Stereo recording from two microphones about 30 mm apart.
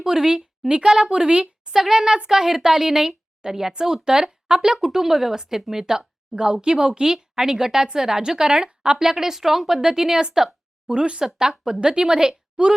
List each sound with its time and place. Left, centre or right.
0.0 s a woman's voice: centre
1.1 s a woman's voice: right
1.7 s speech: centre
2.0 s a woman's voice: right
4.8 s speech: centre
5.8 s a woman's voice: right
9.0 s speech: centre
10.8 s a woman's voice: right